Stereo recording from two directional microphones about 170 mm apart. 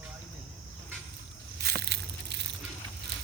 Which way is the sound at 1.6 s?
75° right (ahead or behind).